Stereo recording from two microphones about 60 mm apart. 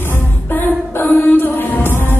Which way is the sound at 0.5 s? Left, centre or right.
Left.